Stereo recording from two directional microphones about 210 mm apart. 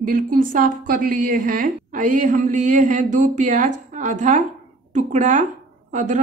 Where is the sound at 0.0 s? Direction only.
40° right (ahead or behind).